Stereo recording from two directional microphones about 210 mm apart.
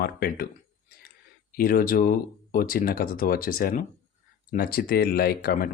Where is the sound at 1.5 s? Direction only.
45° left (ahead or behind).